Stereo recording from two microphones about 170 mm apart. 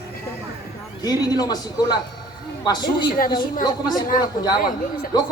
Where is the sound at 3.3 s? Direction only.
25° left (ahead or behind).